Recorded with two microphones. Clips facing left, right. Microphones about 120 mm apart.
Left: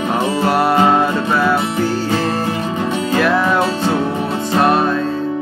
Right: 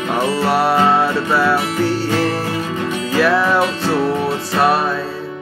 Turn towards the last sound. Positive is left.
turn(degrees=-5)  # may be behind; listen again after turning